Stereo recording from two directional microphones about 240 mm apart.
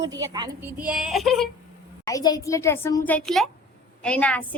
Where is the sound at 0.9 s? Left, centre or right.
Centre.